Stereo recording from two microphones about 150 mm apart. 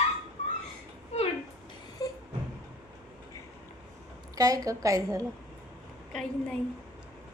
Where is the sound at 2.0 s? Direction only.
25° left (ahead or behind).